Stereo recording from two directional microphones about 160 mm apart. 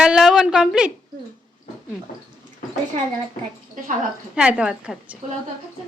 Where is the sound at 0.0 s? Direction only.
5° right (ahead or behind).